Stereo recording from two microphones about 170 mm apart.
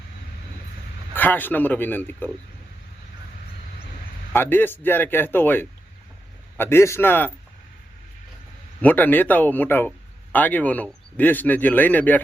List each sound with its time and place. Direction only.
1.1 s speech: 10° left (ahead or behind)
4.3 s speech: 10° left (ahead or behind)
8.8 s speech: 10° left (ahead or behind)